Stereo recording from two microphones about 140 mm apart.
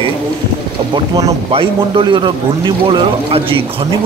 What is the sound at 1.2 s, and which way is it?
Speech, 40° right (ahead or behind).